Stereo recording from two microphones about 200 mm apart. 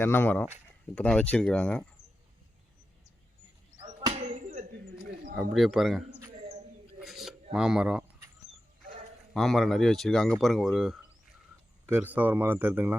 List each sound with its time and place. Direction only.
0.0 s speech: 10° left (ahead or behind)
4.1 s a sound: 35° right (ahead or behind)
5.4 s speech: centre (ahead or behind)
7.0 s a sound: centre (ahead or behind)
7.5 s speech: 5° right (ahead or behind)
9.3 s speech: centre (ahead or behind)